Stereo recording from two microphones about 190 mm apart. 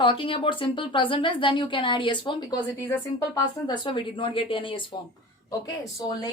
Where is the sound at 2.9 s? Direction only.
10° left (ahead or behind).